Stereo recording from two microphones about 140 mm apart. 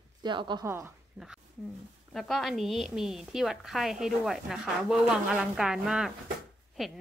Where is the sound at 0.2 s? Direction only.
35° right (ahead or behind).